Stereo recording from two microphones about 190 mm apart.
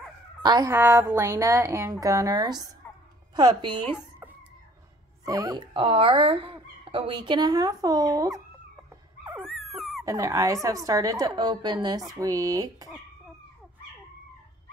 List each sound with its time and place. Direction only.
0.4 s a woman's voice: 20° right (ahead or behind)
5.2 s speech: 20° right (ahead or behind)
9.7 s dog: centre (ahead or behind)
10.0 s speech: 15° right (ahead or behind)